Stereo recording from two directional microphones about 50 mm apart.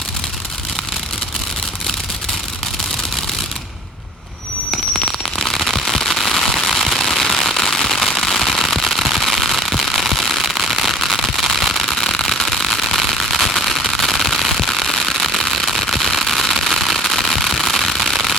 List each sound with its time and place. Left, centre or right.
4.7 s fireworks: centre
11.9 s fireworks: centre